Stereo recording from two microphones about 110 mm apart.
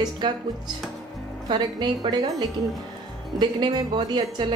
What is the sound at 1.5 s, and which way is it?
A woman's voice, 45° right (ahead or behind).